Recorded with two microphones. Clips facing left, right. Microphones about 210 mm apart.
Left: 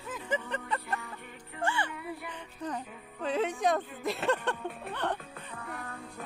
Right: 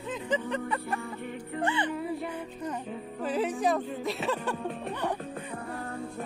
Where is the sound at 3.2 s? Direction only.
5° right (ahead or behind).